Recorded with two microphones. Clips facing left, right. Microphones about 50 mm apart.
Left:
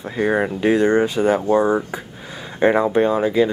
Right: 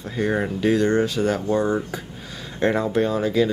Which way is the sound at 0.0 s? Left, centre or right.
Centre.